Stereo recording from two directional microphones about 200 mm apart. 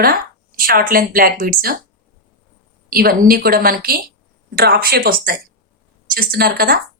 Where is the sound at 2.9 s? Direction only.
50° right (ahead or behind).